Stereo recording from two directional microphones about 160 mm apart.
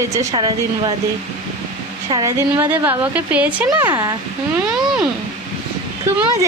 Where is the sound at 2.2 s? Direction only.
15° right (ahead or behind).